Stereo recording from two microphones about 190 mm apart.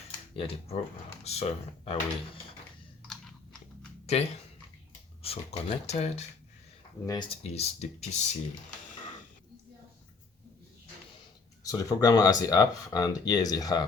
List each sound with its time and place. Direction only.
0.3 s speech: 30° left (ahead or behind)
4.0 s speech: 35° left (ahead or behind)
7.0 s speech: 20° left (ahead or behind)
7.5 s speech: 35° left (ahead or behind)
11.6 s speech: 20° left (ahead or behind)